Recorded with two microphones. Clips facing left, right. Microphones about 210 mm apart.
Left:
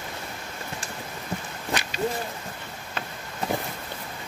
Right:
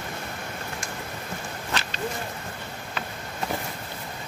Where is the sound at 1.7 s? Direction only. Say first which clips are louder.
Left 3 dB; 15° left (ahead or behind).